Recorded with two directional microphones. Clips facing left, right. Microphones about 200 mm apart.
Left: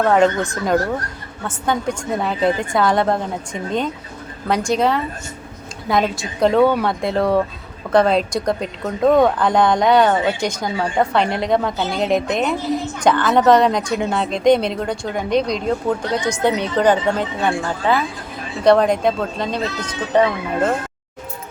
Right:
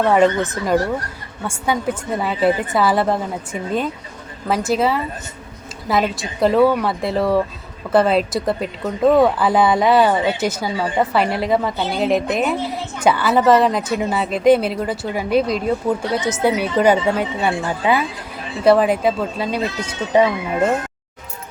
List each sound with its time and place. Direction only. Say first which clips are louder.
0.0 s speech: even; 5° right (ahead or behind)
1.5 s speech: even; 10° right (ahead or behind)